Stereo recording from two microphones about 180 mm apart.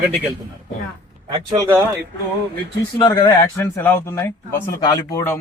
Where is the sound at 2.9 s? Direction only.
25° left (ahead or behind).